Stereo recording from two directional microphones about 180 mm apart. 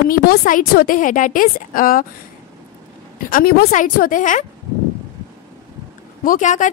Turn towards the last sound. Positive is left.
turn(degrees=45)  # may be behind; listen again after turning